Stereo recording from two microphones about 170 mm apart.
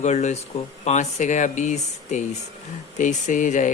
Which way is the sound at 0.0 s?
45° left (ahead or behind).